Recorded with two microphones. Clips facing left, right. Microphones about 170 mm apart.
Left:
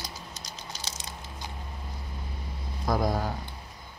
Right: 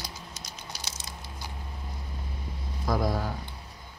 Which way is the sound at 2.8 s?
20° left (ahead or behind).